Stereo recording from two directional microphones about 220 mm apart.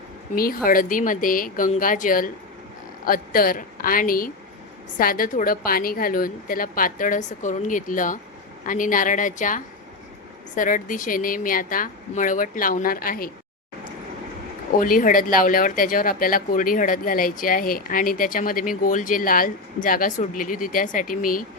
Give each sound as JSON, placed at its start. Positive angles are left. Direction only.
{"t": 0.3, "sound": "speech", "side_deg": 40}
{"t": 14.8, "sound": "speech", "side_deg": 40}